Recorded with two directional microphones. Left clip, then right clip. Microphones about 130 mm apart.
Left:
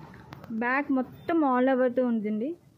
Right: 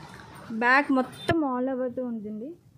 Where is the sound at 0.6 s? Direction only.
25° right (ahead or behind).